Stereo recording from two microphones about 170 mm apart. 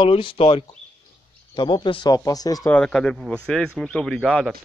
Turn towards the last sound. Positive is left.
turn(degrees=5)  # may be behind; listen again after turning